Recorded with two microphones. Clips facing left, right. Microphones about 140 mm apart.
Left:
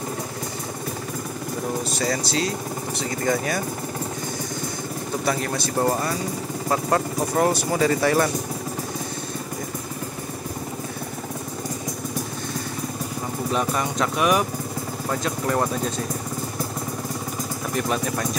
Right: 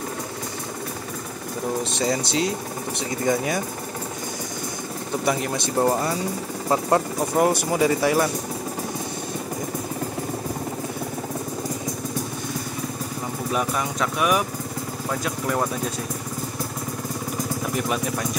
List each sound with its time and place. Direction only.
1.9 s speech: 25° right (ahead or behind)
5.2 s speech: 15° right (ahead or behind)
13.5 s speech: 5° right (ahead or behind)
17.7 s speech: 5° right (ahead or behind)